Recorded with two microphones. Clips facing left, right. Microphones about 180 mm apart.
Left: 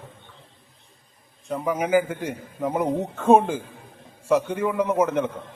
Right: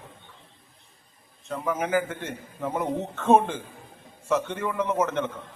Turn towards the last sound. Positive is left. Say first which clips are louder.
# left 4 dB
turn(degrees=10)  # may be behind; listen again after turning